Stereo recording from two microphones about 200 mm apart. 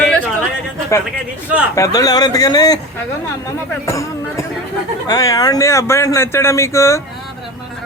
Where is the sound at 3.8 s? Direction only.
15° left (ahead or behind).